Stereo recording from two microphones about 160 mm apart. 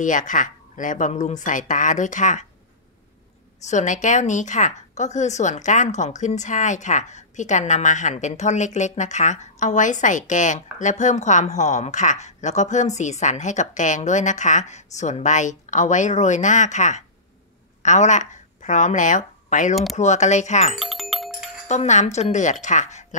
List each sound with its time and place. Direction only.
0.0 s a woman's voice: 55° left (ahead or behind)
3.6 s a woman's voice: 50° left (ahead or behind)
20.8 s music: centre (ahead or behind)
21.6 s a woman's voice: 45° left (ahead or behind)